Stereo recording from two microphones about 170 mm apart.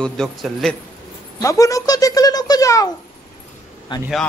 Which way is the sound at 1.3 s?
20° left (ahead or behind).